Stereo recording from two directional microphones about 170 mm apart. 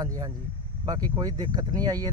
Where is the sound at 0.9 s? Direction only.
20° right (ahead or behind).